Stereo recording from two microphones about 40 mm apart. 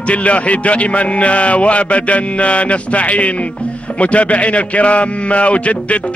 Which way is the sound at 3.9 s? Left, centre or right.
Left.